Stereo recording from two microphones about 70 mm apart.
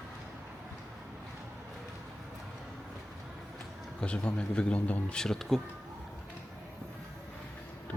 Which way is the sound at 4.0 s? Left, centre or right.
Centre.